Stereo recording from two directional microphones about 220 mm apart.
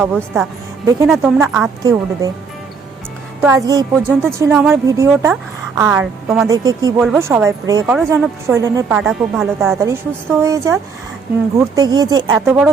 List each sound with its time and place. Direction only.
0.0 s a woman's voice: 5° right (ahead or behind)
1.8 s a woman's voice: 15° right (ahead or behind)
3.4 s a woman's voice: 15° right (ahead or behind)
6.5 s a woman's voice: 15° right (ahead or behind)
9.0 s a woman's voice: centre (ahead or behind)